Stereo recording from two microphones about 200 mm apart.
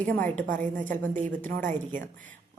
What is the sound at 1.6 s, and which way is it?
Speech, 40° right (ahead or behind).